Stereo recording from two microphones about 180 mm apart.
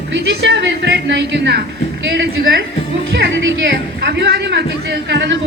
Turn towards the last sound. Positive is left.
turn(degrees=-70)  # may be behind; listen again after turning